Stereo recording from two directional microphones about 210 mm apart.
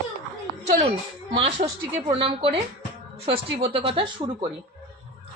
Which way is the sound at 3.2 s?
25° right (ahead or behind).